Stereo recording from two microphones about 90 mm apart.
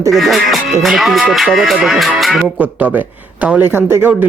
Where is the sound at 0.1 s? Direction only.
Centre (ahead or behind).